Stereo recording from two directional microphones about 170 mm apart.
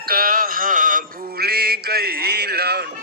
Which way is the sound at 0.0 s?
60° right (ahead or behind).